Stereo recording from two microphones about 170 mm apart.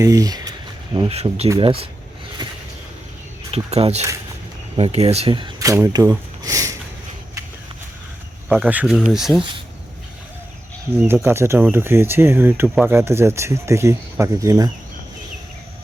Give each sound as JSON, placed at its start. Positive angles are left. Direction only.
{"t": 0.0, "sound": "speech", "side_deg": -20}
{"t": 0.9, "sound": "speech", "side_deg": -35}
{"t": 3.5, "sound": "speech", "side_deg": -35}
{"t": 8.4, "sound": "speech", "side_deg": -5}
{"t": 10.9, "sound": "speech", "side_deg": -15}